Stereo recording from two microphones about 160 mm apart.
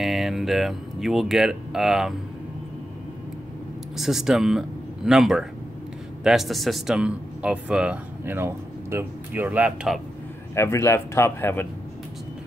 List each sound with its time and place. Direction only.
0.0 s speech: centre (ahead or behind)
3.9 s a man's voice: centre (ahead or behind)
10.5 s speech: 20° left (ahead or behind)